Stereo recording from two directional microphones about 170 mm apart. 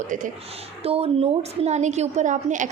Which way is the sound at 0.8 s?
35° right (ahead or behind).